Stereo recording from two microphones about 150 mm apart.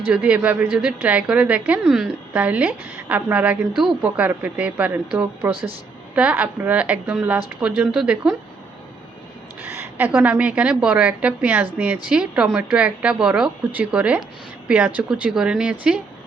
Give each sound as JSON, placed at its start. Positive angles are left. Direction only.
{"t": 0.1, "sound": "a woman's voice", "side_deg": -10}
{"t": 5.5, "sound": "speech", "side_deg": -40}
{"t": 6.1, "sound": "a woman's voice", "side_deg": -10}
{"t": 9.6, "sound": "a woman's voice", "side_deg": -15}